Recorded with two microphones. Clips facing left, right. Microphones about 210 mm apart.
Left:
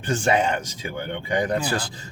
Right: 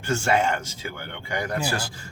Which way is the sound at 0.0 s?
15° left (ahead or behind).